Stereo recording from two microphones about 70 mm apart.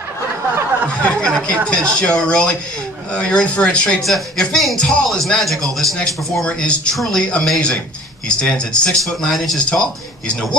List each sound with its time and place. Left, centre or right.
1.0 s a sound: centre
1.7 s speech: centre
9.7 s speech: centre